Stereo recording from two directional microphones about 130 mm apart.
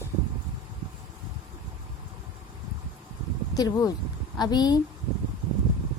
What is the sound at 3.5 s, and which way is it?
Speech, 30° left (ahead or behind).